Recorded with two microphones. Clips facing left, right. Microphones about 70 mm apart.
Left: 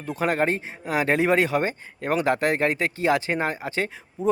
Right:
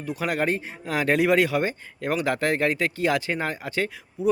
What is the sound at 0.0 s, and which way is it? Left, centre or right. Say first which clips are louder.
Speech: left 2 dB; left.